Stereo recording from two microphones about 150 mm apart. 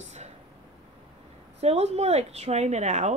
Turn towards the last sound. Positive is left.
turn(degrees=-50)  # may be behind; listen again after turning